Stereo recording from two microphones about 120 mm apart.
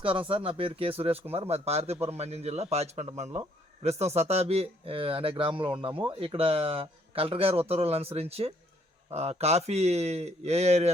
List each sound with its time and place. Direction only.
0.0 s speech: 45° right (ahead or behind); by 10.9 s 65° right (ahead or behind)